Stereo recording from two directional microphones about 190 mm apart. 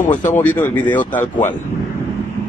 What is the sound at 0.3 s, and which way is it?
Speech, 10° left (ahead or behind).